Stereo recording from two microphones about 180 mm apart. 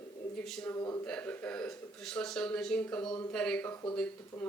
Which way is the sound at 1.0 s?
10° left (ahead or behind).